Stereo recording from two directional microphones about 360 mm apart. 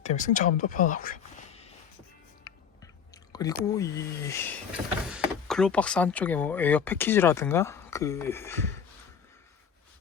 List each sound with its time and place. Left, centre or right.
0.0 s speech: centre
3.3 s speech: centre